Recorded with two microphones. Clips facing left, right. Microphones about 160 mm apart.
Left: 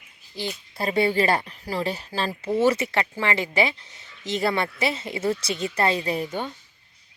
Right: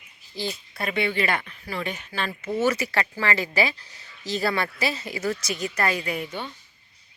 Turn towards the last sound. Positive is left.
turn(degrees=30)  # may be behind; listen again after turning